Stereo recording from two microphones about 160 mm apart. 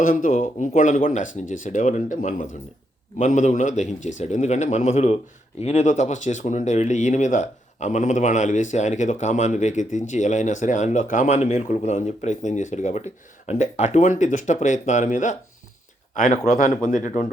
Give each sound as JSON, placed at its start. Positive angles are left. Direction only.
{"t": 0.0, "sound": "speech", "side_deg": 60}